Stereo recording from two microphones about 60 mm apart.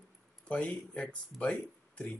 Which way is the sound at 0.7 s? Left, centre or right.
Centre.